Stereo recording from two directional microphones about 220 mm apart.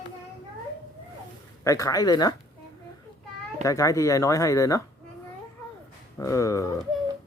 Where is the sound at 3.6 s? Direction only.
15° left (ahead or behind).